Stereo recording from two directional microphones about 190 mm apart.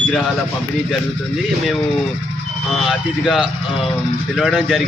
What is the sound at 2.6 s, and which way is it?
Speech, centre (ahead or behind).